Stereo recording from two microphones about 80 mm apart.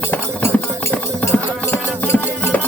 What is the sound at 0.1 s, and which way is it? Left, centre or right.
Music, left.